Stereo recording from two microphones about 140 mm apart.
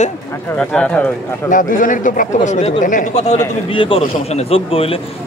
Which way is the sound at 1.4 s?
70° left (ahead or behind).